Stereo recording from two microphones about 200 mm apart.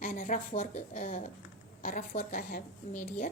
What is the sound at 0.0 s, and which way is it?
A woman's voice, 45° left (ahead or behind).